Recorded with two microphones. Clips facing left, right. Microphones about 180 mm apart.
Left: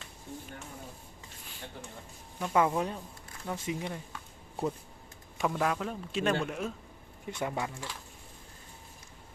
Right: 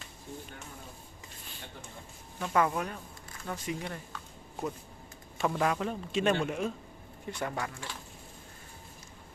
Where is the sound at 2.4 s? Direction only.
15° left (ahead or behind).